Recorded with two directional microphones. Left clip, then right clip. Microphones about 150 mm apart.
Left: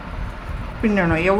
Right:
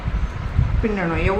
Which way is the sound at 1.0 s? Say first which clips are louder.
Left 6 dB; 65° left (ahead or behind).